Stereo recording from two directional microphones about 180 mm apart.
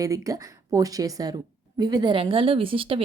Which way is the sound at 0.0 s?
20° right (ahead or behind).